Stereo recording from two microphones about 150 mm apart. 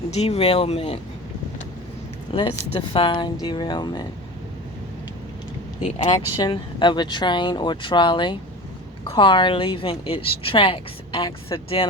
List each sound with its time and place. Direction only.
0.1 s speech: 45° left (ahead or behind)
2.3 s a woman's voice: 40° left (ahead or behind)
6.3 s a woman's voice: 30° left (ahead or behind)